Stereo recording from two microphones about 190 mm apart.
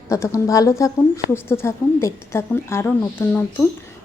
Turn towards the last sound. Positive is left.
turn(degrees=10)  # may be behind; listen again after turning